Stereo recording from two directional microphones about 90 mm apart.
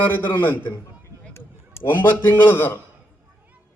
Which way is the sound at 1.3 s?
25° left (ahead or behind).